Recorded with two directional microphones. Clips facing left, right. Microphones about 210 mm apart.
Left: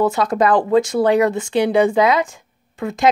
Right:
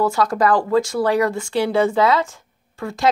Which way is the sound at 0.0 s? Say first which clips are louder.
Left 2 dB; 20° left (ahead or behind).